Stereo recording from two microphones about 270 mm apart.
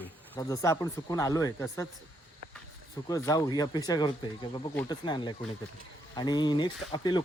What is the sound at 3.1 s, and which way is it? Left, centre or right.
Speech, centre.